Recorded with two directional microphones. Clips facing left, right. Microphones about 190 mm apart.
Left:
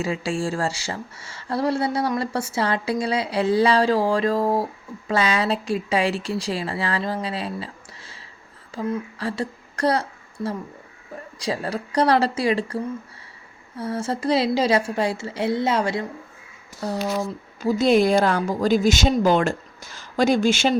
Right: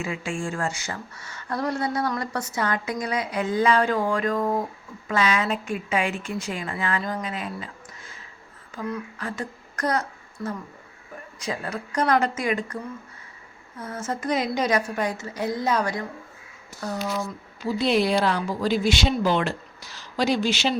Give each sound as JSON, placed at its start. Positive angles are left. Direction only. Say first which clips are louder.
{"t": 0.0, "sound": "a woman's voice", "louder": "left 5 dB", "side_deg": 35}
{"t": 17.6, "sound": "a woman's voice", "louder": "left 5 dB", "side_deg": 45}